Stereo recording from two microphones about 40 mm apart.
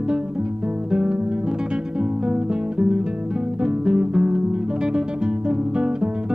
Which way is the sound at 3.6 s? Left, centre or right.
Right.